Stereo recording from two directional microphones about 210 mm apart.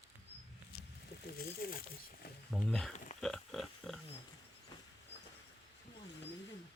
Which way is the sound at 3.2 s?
Centre (ahead or behind).